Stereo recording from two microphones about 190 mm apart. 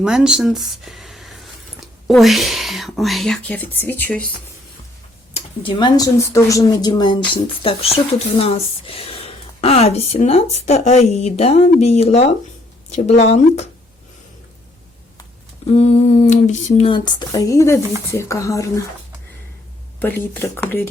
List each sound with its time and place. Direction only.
0.0 s speech: 5° right (ahead or behind)
5.3 s a woman's voice: 25° left (ahead or behind)
15.8 s speech: 35° left (ahead or behind); by 18.8 s 15° left (ahead or behind)
20.0 s speech: 10° left (ahead or behind)